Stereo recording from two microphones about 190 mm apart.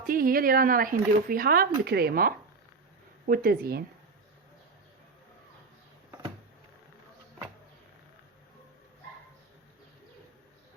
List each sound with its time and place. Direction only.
0.1 s speech: 50° right (ahead or behind)